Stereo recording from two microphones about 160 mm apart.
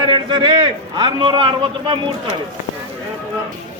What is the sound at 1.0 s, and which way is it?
Speech, 30° right (ahead or behind).